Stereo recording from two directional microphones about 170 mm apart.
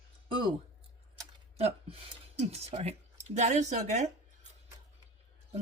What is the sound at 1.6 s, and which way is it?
Speech, 40° right (ahead or behind).